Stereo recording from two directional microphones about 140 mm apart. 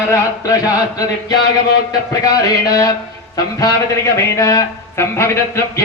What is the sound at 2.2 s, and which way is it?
Speech, 25° left (ahead or behind).